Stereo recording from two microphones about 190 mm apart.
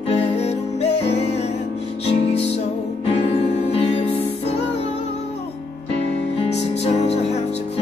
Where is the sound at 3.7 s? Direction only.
30° left (ahead or behind).